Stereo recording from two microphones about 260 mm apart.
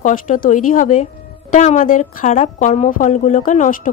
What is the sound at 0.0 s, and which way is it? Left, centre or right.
A woman's voice, left.